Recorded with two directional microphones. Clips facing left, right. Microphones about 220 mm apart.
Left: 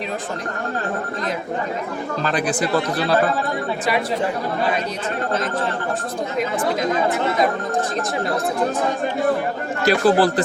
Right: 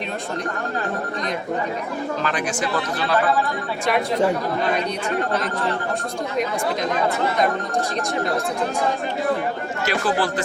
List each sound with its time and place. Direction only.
2.2 s speech: 35° left (ahead or behind)
9.8 s speech: 35° left (ahead or behind)